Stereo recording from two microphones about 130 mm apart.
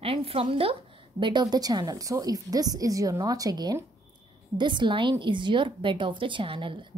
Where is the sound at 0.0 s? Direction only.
45° right (ahead or behind).